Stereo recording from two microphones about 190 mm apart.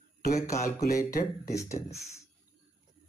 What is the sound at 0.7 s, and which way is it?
Speech, 45° left (ahead or behind).